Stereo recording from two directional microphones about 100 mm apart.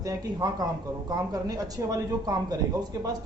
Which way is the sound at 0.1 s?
35° right (ahead or behind).